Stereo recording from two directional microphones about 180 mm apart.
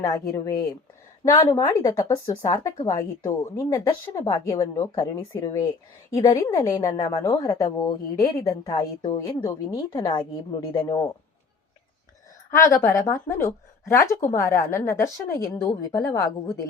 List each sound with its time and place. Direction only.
0.0 s a woman's voice: 20° left (ahead or behind)
12.5 s a woman's voice: 15° left (ahead or behind)